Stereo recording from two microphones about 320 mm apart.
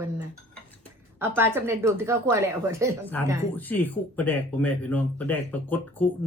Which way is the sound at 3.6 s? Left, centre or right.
Centre.